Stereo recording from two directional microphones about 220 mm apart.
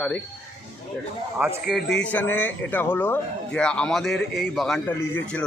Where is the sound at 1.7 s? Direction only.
50° left (ahead or behind).